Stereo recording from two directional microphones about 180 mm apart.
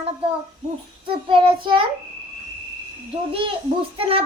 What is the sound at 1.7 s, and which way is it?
Speech, 25° right (ahead or behind).